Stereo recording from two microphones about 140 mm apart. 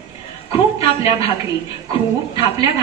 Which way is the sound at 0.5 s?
45° left (ahead or behind).